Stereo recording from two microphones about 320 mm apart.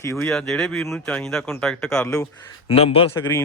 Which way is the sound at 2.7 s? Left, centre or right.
Centre.